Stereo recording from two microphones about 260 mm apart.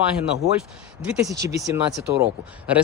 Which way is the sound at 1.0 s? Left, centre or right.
Centre.